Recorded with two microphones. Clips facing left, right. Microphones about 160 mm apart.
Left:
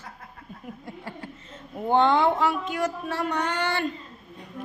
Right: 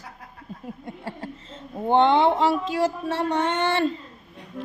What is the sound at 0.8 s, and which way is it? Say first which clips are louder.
A woman's voice: right 4 dB; 30° right (ahead or behind).